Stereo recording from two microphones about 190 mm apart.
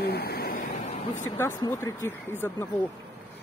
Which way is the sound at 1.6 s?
15° left (ahead or behind).